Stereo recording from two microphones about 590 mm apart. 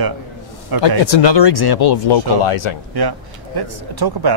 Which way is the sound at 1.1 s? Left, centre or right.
Left.